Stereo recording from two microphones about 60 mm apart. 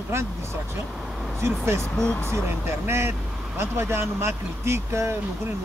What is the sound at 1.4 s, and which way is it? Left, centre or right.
Speech, right.